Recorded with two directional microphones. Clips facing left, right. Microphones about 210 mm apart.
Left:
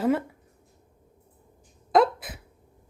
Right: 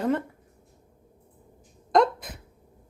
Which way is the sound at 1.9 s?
5° left (ahead or behind).